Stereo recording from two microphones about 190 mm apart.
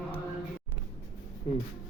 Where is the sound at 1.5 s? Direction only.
30° left (ahead or behind).